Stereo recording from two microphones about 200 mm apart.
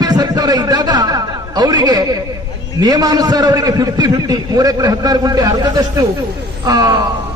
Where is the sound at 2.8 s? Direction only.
20° right (ahead or behind).